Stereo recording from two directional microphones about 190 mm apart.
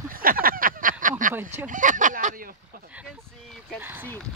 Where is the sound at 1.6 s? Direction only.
45° right (ahead or behind).